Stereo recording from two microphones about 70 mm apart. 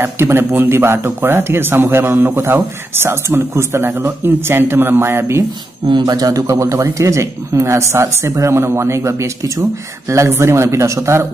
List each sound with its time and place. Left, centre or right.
0.0 s speech: right
5.9 s speech: right